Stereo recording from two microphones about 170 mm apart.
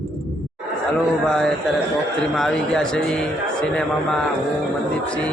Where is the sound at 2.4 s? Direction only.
5° left (ahead or behind).